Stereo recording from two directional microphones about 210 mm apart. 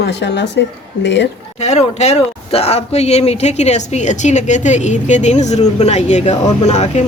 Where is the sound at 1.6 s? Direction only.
30° left (ahead or behind).